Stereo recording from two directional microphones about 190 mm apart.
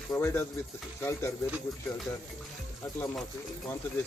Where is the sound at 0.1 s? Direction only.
15° left (ahead or behind).